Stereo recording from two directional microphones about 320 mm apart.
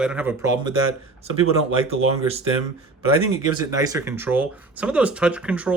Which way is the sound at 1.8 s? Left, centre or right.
Centre.